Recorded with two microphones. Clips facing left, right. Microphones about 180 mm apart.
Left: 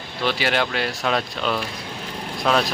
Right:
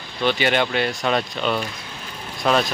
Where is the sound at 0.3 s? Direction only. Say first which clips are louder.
Right 2 dB; centre (ahead or behind).